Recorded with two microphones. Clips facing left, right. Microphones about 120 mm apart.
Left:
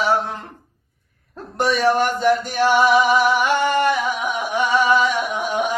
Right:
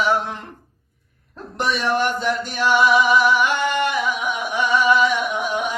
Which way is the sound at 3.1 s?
40° left (ahead or behind).